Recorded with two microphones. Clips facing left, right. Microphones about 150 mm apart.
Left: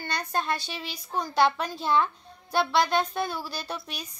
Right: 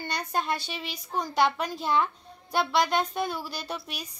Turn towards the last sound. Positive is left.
turn(degrees=-10)  # may be behind; listen again after turning